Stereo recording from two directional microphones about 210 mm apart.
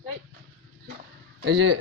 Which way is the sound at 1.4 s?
60° right (ahead or behind).